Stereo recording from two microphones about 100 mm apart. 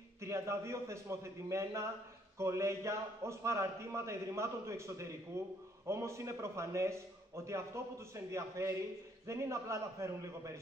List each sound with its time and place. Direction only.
0.2 s a man's voice: 30° right (ahead or behind)